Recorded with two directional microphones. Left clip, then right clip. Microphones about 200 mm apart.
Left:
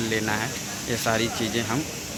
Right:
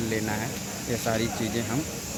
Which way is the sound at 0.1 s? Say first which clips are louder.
Left 4 dB; centre (ahead or behind).